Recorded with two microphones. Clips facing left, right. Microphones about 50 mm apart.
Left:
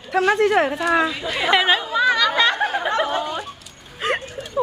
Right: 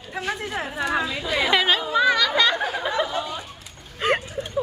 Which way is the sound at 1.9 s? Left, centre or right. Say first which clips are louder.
Left 2 dB; centre.